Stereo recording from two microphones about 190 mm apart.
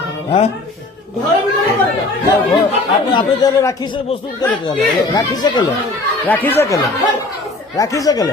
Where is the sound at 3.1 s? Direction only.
20° left (ahead or behind).